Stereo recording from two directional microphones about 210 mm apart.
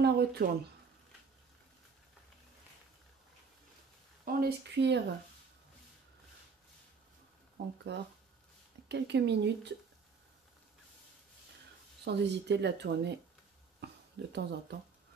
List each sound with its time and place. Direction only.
0.0 s speech: 50° right (ahead or behind)
4.2 s speech: 45° right (ahead or behind)
7.5 s speech: 55° right (ahead or behind)
12.0 s speech: 55° right (ahead or behind)
14.3 s speech: 55° right (ahead or behind)